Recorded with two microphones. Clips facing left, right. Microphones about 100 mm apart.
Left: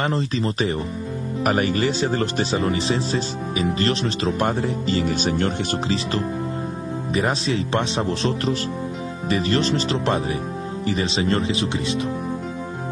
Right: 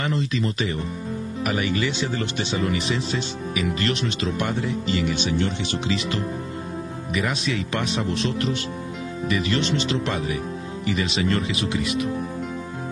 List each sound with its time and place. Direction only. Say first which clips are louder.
0.0 s speech: left 2 dB; 35° left (ahead or behind)